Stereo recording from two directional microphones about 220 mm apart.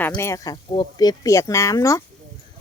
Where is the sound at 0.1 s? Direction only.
15° left (ahead or behind).